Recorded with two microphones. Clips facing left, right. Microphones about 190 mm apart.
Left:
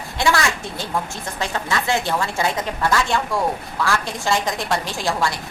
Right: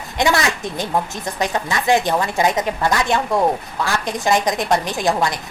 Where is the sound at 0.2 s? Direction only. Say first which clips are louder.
Right 2 dB; 20° right (ahead or behind).